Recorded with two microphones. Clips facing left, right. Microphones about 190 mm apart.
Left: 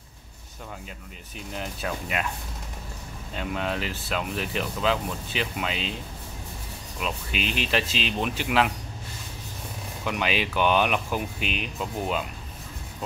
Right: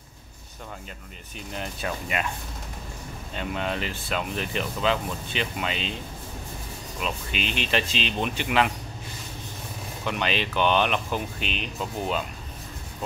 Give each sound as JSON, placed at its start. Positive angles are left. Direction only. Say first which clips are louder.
{"t": 1.5, "sound": "speech", "louder": "even", "side_deg": 0}
{"t": 3.3, "sound": "speech", "louder": "even", "side_deg": 0}
{"t": 7.0, "sound": "speech", "louder": "even", "side_deg": 5}
{"t": 10.0, "sound": "speech", "louder": "even", "side_deg": 5}